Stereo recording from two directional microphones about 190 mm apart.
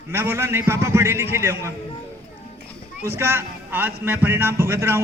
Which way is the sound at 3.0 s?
15° right (ahead or behind).